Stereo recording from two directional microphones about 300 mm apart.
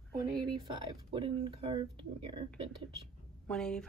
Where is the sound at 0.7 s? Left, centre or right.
Centre.